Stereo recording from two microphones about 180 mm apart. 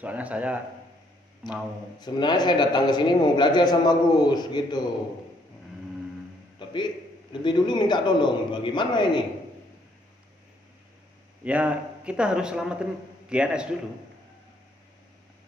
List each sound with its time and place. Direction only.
0.0 s a man's voice: 10° right (ahead or behind)
2.0 s a man's voice: 25° left (ahead or behind)
6.6 s a sound: 25° left (ahead or behind)
7.4 s a man's voice: 25° left (ahead or behind)
11.4 s a man's voice: 5° right (ahead or behind)